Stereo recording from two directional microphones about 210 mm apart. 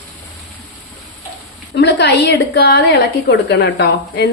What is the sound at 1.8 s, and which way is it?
A woman's voice, 55° left (ahead or behind).